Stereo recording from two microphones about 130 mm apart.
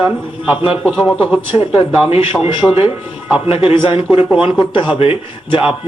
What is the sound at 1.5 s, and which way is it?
A man's voice, 45° left (ahead or behind).